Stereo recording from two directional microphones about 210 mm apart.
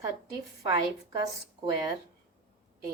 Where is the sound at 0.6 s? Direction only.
15° right (ahead or behind).